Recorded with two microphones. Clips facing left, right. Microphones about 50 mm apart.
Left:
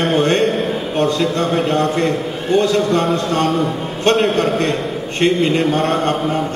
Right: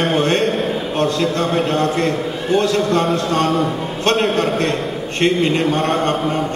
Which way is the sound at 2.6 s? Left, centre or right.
Centre.